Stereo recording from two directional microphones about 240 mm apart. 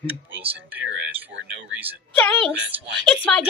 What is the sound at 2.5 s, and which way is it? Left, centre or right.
Speech, right.